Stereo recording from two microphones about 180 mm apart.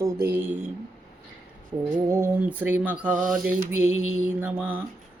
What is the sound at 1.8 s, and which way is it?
Mantra, 25° right (ahead or behind).